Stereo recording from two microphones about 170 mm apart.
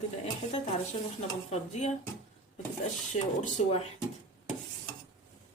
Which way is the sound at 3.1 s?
40° left (ahead or behind).